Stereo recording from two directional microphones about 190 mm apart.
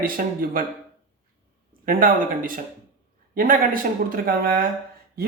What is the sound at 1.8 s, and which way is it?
Speech, 50° right (ahead or behind).